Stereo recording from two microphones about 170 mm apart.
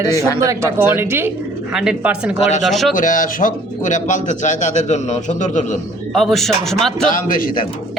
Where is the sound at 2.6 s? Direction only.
Centre (ahead or behind).